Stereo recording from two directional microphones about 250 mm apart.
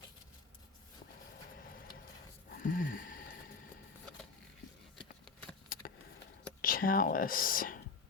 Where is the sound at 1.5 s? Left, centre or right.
Left.